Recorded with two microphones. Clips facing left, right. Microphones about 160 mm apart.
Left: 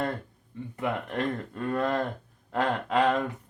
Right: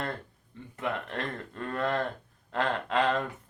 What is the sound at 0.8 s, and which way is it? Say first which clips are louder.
Speech: left 3 dB; 15° left (ahead or behind).